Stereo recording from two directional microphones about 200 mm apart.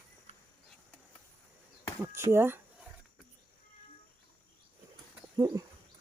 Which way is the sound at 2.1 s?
10° right (ahead or behind).